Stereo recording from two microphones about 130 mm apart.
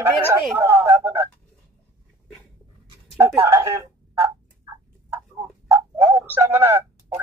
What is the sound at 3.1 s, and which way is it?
Speech, 20° right (ahead or behind).